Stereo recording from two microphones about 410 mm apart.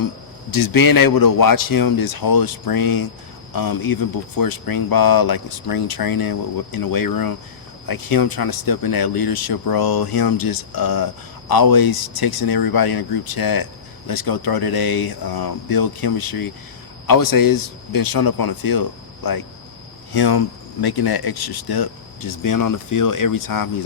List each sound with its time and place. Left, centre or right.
0.5 s speech: left